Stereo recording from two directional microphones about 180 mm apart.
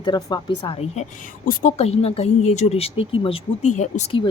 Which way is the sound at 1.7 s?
35° left (ahead or behind).